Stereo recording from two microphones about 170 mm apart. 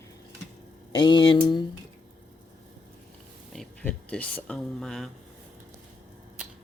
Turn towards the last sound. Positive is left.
turn(degrees=0)  # may be behind; listen again after turning